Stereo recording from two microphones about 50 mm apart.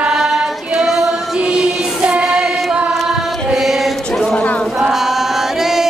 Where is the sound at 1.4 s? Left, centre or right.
Centre.